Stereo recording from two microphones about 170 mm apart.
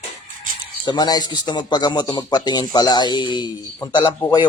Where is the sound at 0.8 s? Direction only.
25° left (ahead or behind).